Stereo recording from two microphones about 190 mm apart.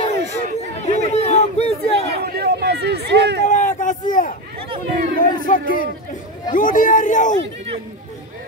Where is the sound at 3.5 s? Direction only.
40° left (ahead or behind).